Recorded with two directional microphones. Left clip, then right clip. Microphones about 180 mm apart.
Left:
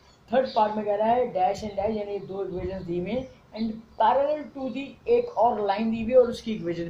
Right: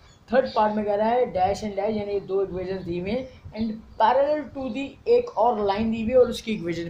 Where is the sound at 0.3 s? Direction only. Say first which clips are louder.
Right 2 dB; 35° right (ahead or behind).